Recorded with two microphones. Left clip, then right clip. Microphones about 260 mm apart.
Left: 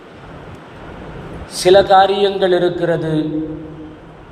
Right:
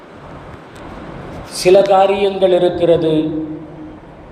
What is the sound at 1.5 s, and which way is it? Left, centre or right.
Speech, centre.